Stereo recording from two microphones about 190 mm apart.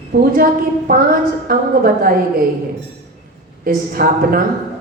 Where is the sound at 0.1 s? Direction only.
55° right (ahead or behind).